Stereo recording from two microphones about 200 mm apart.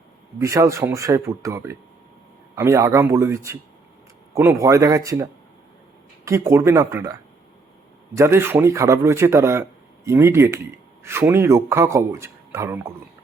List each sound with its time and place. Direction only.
0.3 s speech: 15° right (ahead or behind)